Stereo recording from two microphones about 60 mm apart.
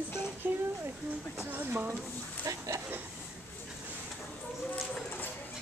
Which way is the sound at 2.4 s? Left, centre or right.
Right.